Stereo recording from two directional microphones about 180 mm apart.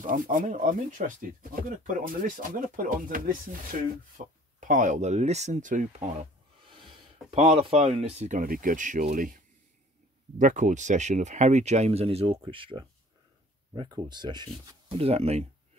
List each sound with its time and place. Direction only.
0.0 s speech: 45° right (ahead or behind)
4.6 s speech: 45° right (ahead or behind)
7.2 s speech: 30° right (ahead or behind); by 9.4 s 50° right (ahead or behind)
10.4 s speech: 45° right (ahead or behind)